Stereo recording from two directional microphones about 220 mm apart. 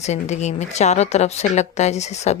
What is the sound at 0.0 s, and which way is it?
Speech, 30° left (ahead or behind).